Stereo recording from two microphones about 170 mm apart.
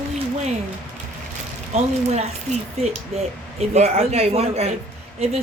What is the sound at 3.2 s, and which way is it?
A man's voice, 40° right (ahead or behind).